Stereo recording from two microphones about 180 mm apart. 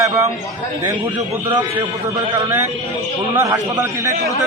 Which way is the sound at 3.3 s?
15° right (ahead or behind).